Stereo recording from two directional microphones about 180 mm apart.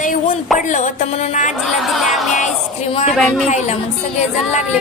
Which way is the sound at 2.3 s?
40° left (ahead or behind).